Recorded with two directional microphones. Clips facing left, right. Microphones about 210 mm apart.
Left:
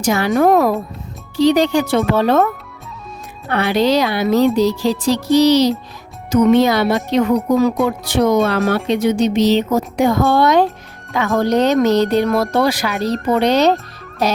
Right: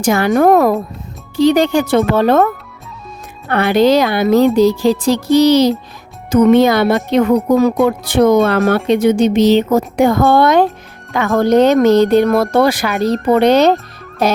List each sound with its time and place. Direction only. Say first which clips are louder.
0.0 s speech: right 3 dB; 50° right (ahead or behind)
3.5 s speech: right 4 dB; 50° right (ahead or behind)
13.1 s speech: right 5 dB; 65° right (ahead or behind)